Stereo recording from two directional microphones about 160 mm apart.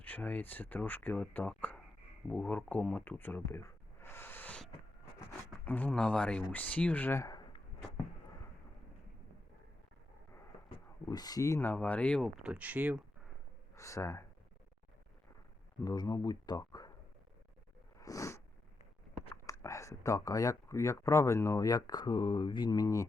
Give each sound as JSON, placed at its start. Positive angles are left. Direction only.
{"t": 0.0, "sound": "speech", "side_deg": 10}
{"t": 4.0, "sound": "a sound", "side_deg": 15}
{"t": 5.6, "sound": "speech", "side_deg": 10}
{"t": 11.1, "sound": "speech", "side_deg": 25}
{"t": 12.4, "sound": "speech", "side_deg": -5}
{"t": 13.7, "sound": "speech", "side_deg": 20}
{"t": 15.8, "sound": "speech", "side_deg": 20}
{"t": 17.9, "sound": "a sound", "side_deg": 20}
{"t": 19.5, "sound": "speech", "side_deg": 20}